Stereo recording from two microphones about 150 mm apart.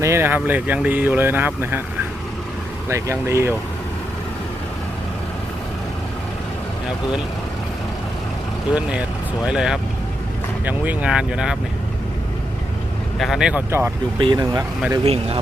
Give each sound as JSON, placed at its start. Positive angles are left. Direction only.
{"t": 0.0, "sound": "speech", "side_deg": -15}
{"t": 2.9, "sound": "speech", "side_deg": -20}
{"t": 8.7, "sound": "speech", "side_deg": -10}
{"t": 13.1, "sound": "speech", "side_deg": 0}
{"t": 13.7, "sound": "speech", "side_deg": -15}
{"t": 14.2, "sound": "speech", "side_deg": -30}
{"t": 15.0, "sound": "speech", "side_deg": -40}